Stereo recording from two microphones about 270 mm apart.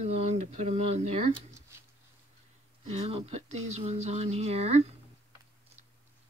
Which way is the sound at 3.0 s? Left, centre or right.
Right.